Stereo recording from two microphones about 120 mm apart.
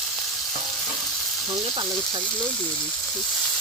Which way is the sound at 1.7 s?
40° right (ahead or behind).